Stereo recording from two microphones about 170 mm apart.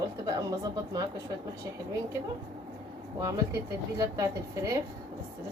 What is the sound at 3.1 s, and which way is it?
A woman's voice, 25° right (ahead or behind).